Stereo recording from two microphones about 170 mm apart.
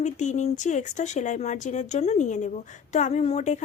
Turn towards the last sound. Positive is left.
turn(degrees=45)  # may be behind; listen again after turning